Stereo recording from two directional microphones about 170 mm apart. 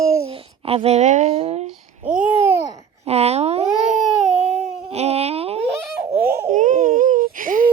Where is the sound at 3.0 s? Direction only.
40° right (ahead or behind).